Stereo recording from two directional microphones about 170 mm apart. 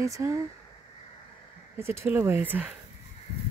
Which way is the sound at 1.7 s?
15° right (ahead or behind).